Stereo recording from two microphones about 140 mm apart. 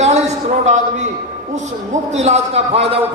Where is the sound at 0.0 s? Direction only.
50° right (ahead or behind).